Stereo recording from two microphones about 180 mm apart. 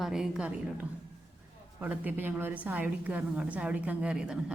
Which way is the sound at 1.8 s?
10° right (ahead or behind).